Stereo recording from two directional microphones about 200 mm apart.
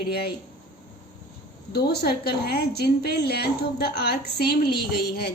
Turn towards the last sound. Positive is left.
turn(degrees=50)  # may be behind; listen again after turning